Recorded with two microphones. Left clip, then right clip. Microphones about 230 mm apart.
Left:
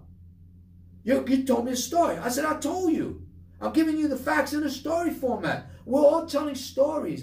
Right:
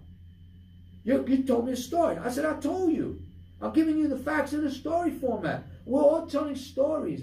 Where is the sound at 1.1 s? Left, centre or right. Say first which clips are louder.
Left 2 dB; centre.